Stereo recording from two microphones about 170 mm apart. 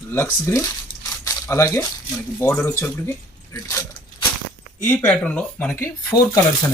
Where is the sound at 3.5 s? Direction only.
20° left (ahead or behind).